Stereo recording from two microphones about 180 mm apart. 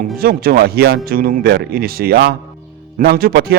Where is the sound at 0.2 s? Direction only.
55° right (ahead or behind).